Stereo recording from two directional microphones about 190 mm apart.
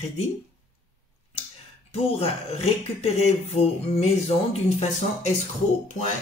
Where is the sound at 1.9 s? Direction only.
30° left (ahead or behind).